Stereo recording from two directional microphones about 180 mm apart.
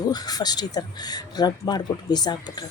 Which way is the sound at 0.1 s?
20° left (ahead or behind).